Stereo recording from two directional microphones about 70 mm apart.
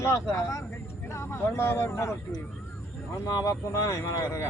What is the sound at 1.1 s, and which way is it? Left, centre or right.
Speech, left.